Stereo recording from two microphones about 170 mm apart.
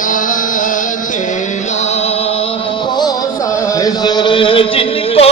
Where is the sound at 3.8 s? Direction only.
25° left (ahead or behind).